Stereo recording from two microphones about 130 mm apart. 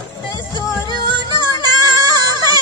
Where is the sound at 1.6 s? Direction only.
30° right (ahead or behind).